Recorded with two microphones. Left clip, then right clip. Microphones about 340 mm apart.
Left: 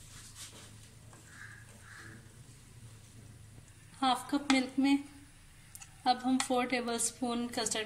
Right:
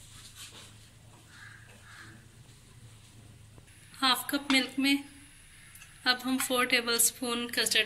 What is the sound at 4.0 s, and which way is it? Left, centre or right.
A woman's voice, centre.